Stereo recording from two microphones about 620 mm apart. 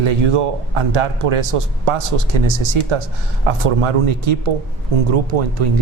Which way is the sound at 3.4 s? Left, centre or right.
Right.